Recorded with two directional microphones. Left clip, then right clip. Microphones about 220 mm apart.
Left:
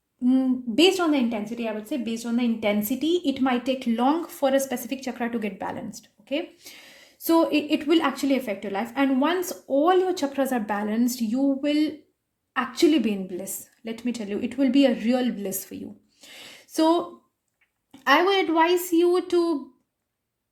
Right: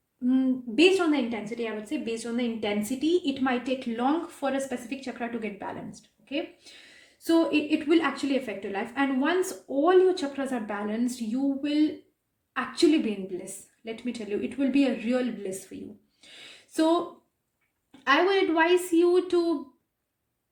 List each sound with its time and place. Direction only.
0.8 s a woman's voice: 30° left (ahead or behind)
16.2 s a sound: 35° left (ahead or behind)
18.1 s a woman's voice: 35° left (ahead or behind)